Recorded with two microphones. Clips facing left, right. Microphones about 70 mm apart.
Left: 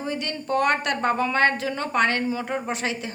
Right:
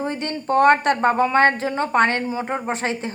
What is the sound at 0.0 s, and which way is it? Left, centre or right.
Speech, right.